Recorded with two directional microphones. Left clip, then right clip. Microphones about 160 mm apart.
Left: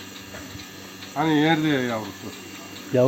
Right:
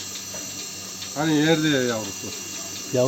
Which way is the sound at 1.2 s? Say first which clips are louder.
Even; 20° right (ahead or behind).